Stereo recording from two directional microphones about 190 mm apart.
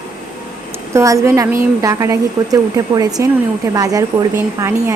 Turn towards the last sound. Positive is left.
turn(degrees=-15)  # may be behind; listen again after turning